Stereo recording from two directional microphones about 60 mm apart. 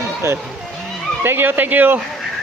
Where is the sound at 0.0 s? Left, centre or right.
Right.